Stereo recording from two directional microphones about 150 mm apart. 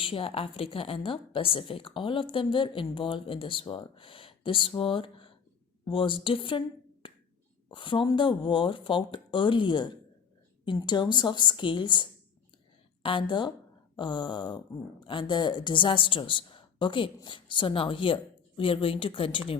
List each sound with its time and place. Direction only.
0.0 s a woman's voice: 35° left (ahead or behind)
7.0 s finger snapping: 35° left (ahead or behind)
7.7 s a woman's voice: 35° left (ahead or behind)